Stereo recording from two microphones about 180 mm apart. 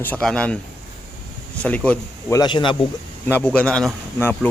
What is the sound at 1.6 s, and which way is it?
Speech, 5° left (ahead or behind).